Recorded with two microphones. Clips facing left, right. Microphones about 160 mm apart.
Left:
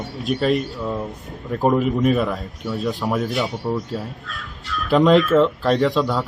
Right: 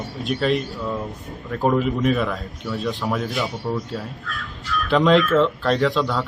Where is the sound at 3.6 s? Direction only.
15° left (ahead or behind).